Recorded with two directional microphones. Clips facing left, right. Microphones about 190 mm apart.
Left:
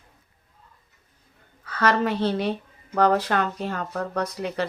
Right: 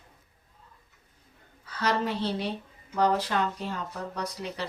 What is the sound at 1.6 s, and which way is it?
Speech, 65° left (ahead or behind).